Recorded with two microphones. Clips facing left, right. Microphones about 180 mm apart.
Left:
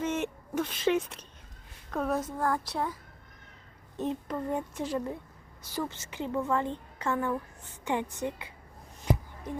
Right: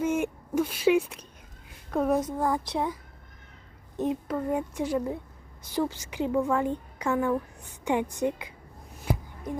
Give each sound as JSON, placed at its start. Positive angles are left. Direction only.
{"t": 0.0, "sound": "a woman's voice", "side_deg": -10}
{"t": 3.9, "sound": "a woman's voice", "side_deg": -10}